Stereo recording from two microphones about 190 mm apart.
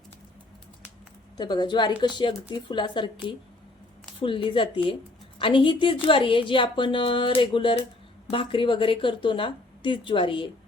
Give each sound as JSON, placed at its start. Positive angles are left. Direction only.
{"t": 1.4, "sound": "a woman's voice", "side_deg": 20}
{"t": 4.2, "sound": "a woman's voice", "side_deg": 25}